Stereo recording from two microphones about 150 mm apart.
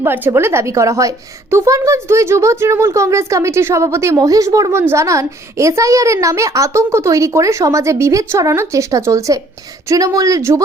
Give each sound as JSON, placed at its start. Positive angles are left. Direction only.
{"t": 0.0, "sound": "a woman's voice", "side_deg": -15}